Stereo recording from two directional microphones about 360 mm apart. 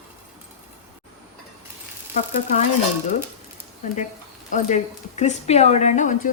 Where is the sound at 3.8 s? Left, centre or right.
Centre.